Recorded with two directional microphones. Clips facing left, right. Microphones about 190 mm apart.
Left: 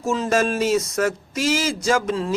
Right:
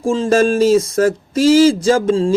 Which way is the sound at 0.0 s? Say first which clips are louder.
Right 7 dB; 30° right (ahead or behind).